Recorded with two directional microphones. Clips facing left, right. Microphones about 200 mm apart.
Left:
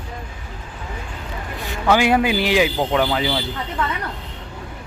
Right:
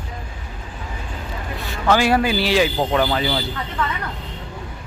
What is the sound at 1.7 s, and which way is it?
A man's voice, 15° left (ahead or behind).